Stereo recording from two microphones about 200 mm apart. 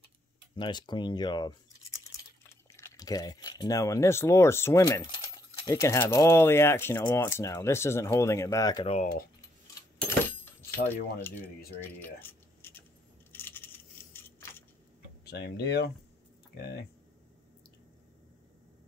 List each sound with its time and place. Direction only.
0.6 s speech: 20° left (ahead or behind)
2.7 s speech: 20° left (ahead or behind)
8.8 s speech: 30° left (ahead or behind)
9.9 s keys jangling: 10° left (ahead or behind)
13.3 s a sound: 10° left (ahead or behind)
15.2 s speech: 55° left (ahead or behind)